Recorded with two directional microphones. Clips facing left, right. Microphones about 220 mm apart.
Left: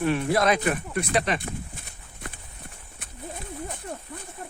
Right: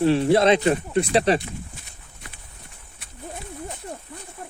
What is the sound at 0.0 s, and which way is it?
Speech, 30° right (ahead or behind).